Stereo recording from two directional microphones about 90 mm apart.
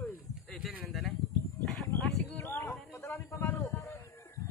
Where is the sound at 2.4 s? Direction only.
30° left (ahead or behind).